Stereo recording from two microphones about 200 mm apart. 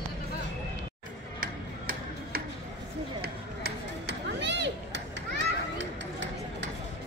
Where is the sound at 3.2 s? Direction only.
55° right (ahead or behind).